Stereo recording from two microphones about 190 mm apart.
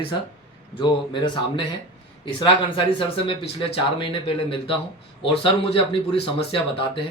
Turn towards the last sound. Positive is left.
turn(degrees=30)  # may be behind; listen again after turning